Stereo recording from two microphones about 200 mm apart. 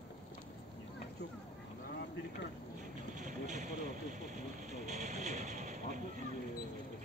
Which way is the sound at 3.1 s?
40° right (ahead or behind).